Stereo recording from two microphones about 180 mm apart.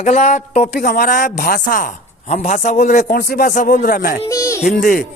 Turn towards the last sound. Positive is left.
turn(degrees=50)  # may be behind; listen again after turning